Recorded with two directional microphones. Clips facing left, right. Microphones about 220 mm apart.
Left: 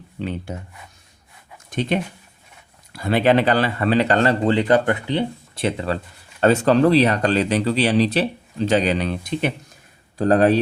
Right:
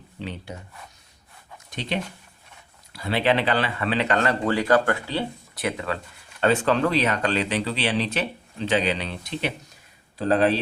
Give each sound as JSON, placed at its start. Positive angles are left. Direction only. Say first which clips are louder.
{"t": 0.2, "sound": "speech", "louder": "left 7 dB", "side_deg": 50}
{"t": 1.7, "sound": "speech", "louder": "left 7 dB", "side_deg": 50}